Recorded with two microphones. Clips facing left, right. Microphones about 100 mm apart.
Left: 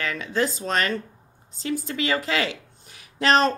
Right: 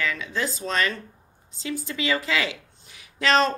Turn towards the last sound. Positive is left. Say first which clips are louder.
# left 1 dB
turn(degrees=35)  # may be behind; listen again after turning